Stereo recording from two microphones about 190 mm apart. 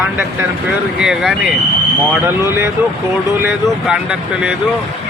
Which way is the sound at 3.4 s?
5° right (ahead or behind).